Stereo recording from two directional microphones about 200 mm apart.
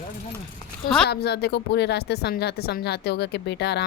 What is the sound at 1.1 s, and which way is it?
A woman's voice, 55° left (ahead or behind).